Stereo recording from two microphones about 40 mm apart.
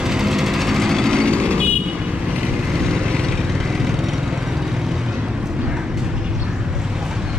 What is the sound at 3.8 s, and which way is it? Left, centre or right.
Lawn mower, centre.